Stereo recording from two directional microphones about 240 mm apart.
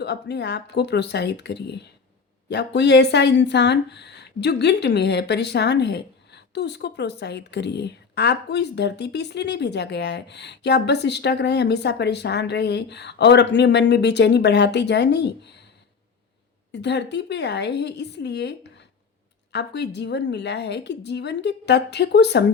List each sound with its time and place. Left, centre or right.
0.0 s speech: left
16.7 s speech: left